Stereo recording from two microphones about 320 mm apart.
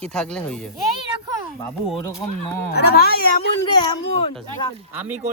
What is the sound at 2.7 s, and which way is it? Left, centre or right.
Speech, left.